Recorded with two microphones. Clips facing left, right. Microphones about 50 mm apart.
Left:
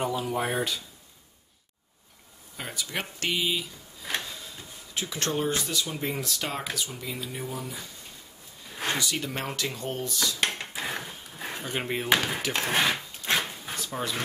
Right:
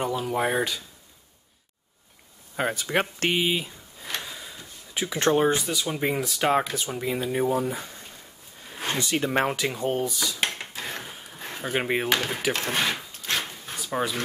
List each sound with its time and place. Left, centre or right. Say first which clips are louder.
0.0 s speech: right 3 dB; centre
2.5 s speech: right 9 dB; right
5.0 s speech: right 8 dB; right
6.7 s speech: right 6 dB; right
9.0 s speech: right 7 dB; right
9.6 s speech: right 6 dB; centre
10.7 s a sound: left 1 dB; centre
11.6 s speech: right 6 dB; centre
12.1 s speech: even; centre
12.5 s a sound: left 1 dB; centre
14.0 s speech: right 5 dB; centre